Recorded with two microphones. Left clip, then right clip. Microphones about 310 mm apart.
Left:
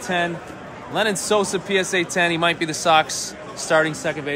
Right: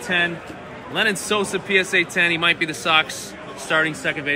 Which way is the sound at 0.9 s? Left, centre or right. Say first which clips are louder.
Left 1 dB; left.